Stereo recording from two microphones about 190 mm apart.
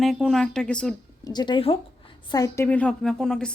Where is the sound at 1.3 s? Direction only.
25° left (ahead or behind).